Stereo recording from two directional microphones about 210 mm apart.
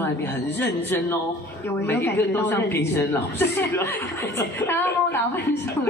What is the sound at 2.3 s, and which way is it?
A woman's voice, 10° left (ahead or behind).